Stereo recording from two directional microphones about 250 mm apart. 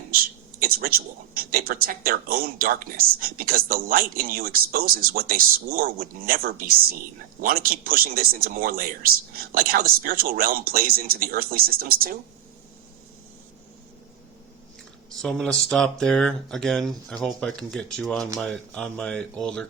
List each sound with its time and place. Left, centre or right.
0.1 s speech: right
15.2 s speech: centre